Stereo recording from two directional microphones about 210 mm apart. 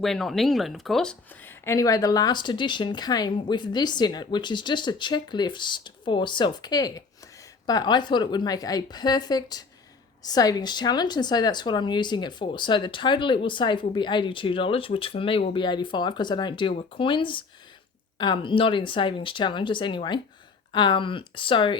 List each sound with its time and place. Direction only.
0.0 s speech: centre (ahead or behind); by 21.8 s 25° left (ahead or behind)